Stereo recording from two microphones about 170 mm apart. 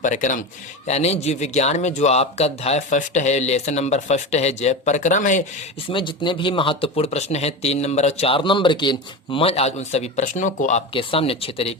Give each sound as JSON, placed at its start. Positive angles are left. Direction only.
{"t": 0.0, "sound": "a man's voice", "side_deg": 45}
{"t": 5.9, "sound": "speech", "side_deg": 30}